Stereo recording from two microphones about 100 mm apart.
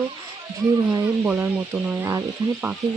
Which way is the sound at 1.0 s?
20° right (ahead or behind).